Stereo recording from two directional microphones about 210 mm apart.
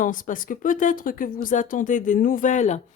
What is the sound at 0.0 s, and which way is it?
Speech, 40° left (ahead or behind).